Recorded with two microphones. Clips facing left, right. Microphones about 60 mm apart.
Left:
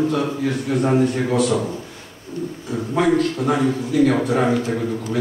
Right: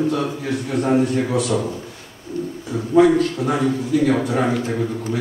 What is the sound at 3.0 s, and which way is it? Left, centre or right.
A man's voice, centre.